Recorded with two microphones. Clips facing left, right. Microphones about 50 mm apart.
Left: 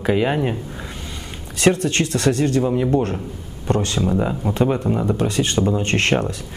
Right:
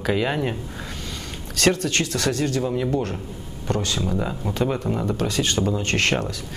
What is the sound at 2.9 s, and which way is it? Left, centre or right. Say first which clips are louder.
Speech: left 5 dB; left.